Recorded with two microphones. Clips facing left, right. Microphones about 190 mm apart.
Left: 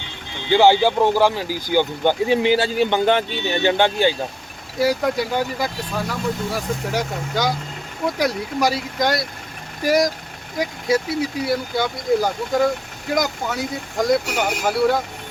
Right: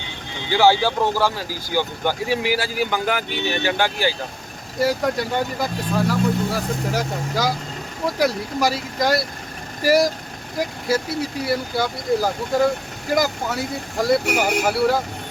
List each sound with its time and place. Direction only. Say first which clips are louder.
0.5 s speech: left 3 dB; 20° left (ahead or behind)
4.8 s speech: left 1 dB; centre (ahead or behind)